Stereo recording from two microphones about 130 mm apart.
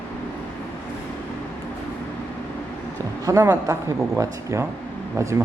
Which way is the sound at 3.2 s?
25° right (ahead or behind).